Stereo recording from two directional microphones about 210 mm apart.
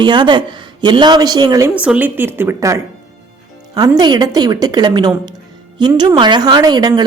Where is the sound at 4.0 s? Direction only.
20° right (ahead or behind).